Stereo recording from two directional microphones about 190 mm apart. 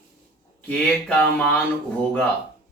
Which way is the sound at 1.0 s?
5° left (ahead or behind).